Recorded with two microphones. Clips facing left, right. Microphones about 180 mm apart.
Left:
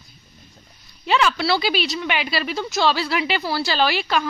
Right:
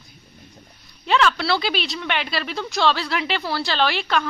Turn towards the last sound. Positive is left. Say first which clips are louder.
# left 1 dB
turn(degrees=5)  # may be behind; listen again after turning